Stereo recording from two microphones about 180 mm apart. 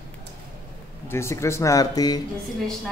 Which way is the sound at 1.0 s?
15° left (ahead or behind).